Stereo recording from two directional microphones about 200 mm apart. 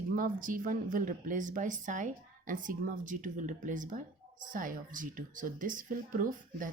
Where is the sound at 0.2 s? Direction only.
40° right (ahead or behind).